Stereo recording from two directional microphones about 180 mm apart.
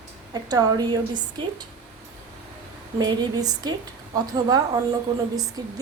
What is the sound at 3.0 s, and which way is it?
Speech, 25° right (ahead or behind).